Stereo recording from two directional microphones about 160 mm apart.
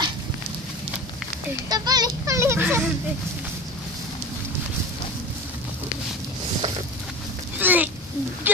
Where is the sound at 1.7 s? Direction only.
25° right (ahead or behind).